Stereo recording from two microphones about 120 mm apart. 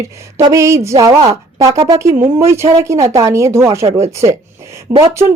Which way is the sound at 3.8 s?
60° right (ahead or behind).